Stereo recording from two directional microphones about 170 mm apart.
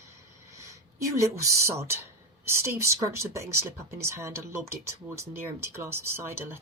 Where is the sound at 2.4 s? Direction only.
15° right (ahead or behind).